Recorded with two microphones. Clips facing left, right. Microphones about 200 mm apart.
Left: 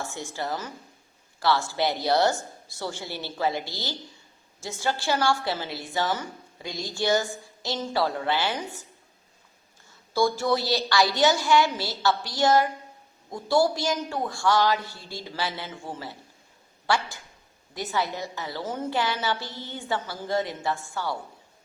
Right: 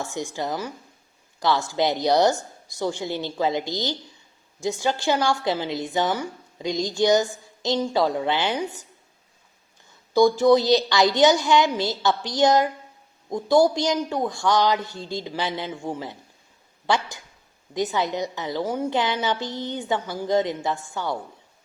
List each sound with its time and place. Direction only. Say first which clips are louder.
0.0 s a woman's voice: right 4 dB; 15° right (ahead or behind)
10.1 s a woman's voice: right 8 dB; 15° right (ahead or behind)